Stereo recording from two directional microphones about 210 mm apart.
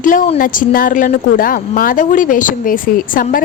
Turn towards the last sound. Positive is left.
turn(degrees=40)  # may be behind; listen again after turning